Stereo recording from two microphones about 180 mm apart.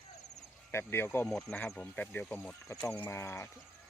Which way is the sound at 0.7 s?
15° left (ahead or behind).